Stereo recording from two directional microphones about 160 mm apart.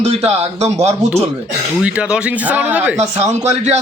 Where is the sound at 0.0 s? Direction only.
40° right (ahead or behind).